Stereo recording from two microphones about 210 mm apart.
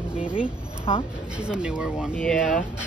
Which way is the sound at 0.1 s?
5° right (ahead or behind).